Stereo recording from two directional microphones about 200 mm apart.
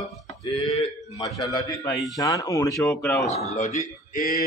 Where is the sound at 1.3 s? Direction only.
15° left (ahead or behind).